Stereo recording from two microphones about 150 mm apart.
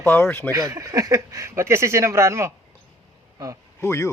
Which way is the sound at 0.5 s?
20° right (ahead or behind).